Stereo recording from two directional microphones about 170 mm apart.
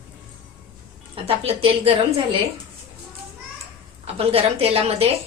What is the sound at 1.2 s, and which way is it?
Speech, 35° right (ahead or behind).